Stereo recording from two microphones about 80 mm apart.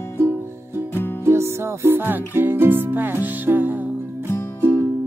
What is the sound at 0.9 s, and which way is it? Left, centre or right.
Music, left.